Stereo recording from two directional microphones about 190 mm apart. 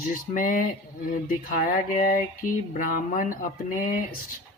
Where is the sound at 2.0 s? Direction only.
45° left (ahead or behind).